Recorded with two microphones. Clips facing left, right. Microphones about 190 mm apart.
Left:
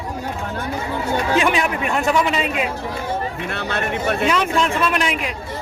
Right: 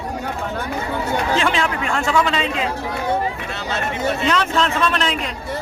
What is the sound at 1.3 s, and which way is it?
A man's voice, 15° left (ahead or behind).